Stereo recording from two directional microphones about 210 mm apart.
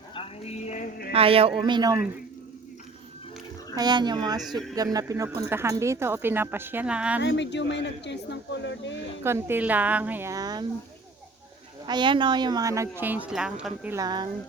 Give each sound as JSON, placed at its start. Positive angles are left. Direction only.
{"t": 0.1, "sound": "a sound", "side_deg": 30}
{"t": 1.1, "sound": "speech", "side_deg": -25}
{"t": 3.8, "sound": "speech", "side_deg": -20}
{"t": 7.2, "sound": "speech", "side_deg": 55}
{"t": 9.2, "sound": "speech", "side_deg": -10}
{"t": 11.9, "sound": "speech", "side_deg": -20}
{"t": 14.0, "sound": "speech", "side_deg": -20}